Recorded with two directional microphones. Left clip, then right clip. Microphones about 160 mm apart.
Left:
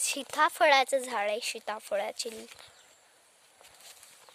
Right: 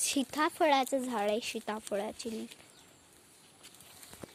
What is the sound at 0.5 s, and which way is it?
Speech, 60° left (ahead or behind).